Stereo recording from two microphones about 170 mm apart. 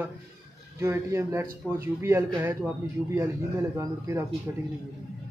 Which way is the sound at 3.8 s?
15° right (ahead or behind).